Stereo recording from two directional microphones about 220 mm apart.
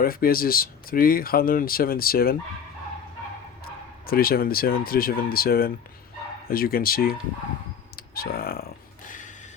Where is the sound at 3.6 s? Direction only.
40° left (ahead or behind).